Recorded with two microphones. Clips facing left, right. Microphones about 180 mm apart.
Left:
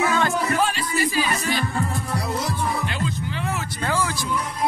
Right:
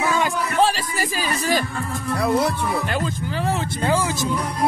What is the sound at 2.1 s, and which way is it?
Music, 55° right (ahead or behind).